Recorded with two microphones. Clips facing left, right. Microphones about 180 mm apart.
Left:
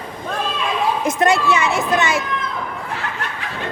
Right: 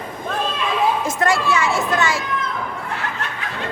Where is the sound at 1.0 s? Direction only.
20° left (ahead or behind).